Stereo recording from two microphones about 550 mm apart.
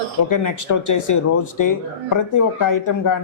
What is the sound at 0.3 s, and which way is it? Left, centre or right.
Speech, left.